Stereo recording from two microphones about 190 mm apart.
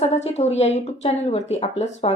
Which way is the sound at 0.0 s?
35° left (ahead or behind).